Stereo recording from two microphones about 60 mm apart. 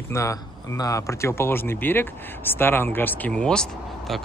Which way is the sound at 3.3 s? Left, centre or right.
Centre.